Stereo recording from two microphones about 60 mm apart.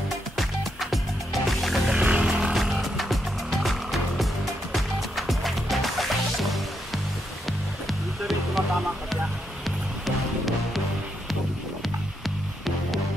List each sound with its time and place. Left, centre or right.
0.4 s music: centre
2.0 s music: centre
2.5 s music: centre
10.0 s music: centre